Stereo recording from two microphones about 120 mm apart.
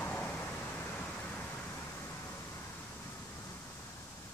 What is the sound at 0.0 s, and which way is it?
Vehicle, 15° left (ahead or behind).